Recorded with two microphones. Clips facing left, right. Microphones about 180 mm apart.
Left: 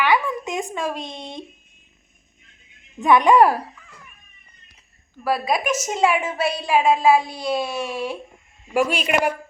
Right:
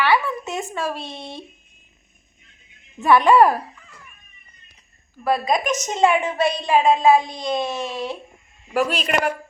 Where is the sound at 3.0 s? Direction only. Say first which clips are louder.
Even; 15° left (ahead or behind).